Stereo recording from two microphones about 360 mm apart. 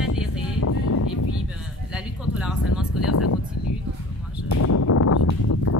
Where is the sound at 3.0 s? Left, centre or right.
Left.